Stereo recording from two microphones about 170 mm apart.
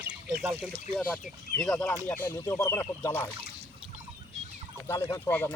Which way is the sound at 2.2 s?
15° left (ahead or behind).